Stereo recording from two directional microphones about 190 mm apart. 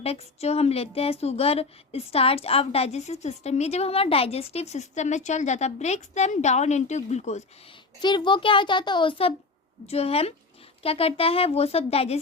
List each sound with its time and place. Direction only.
0.0 s a woman's voice: 30° left (ahead or behind)
8.0 s a child's voice: 25° left (ahead or behind)